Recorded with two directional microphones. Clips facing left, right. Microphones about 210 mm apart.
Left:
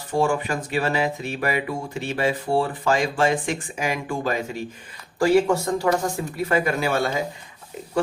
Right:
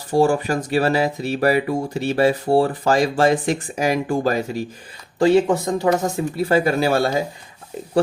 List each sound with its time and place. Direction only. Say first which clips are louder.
0.1 s speech: right 5 dB; 35° right (ahead or behind)
5.2 s speech: right 3 dB; 20° right (ahead or behind)